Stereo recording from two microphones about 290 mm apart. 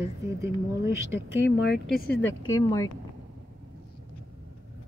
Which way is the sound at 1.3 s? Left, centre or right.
Left.